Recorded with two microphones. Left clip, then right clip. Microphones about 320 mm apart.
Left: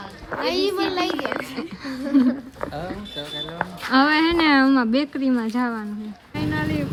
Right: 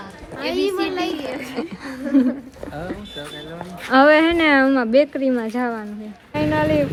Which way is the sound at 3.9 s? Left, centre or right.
Centre.